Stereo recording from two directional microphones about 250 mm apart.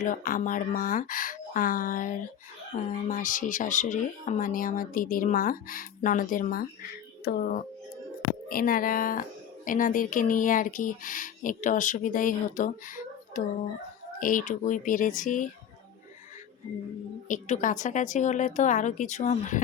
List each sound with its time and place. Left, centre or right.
0.0 s speech: left
17.2 s a woman's voice: left